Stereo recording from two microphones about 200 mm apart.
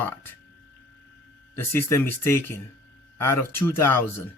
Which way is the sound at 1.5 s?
10° left (ahead or behind).